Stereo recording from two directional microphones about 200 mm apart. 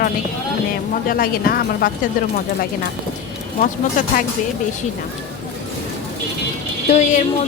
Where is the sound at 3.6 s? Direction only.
40° left (ahead or behind).